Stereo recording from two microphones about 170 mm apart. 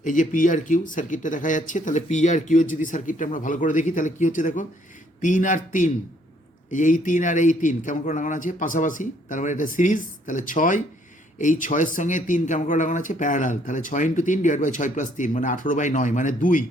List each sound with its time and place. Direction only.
0.0 s speech: 50° left (ahead or behind)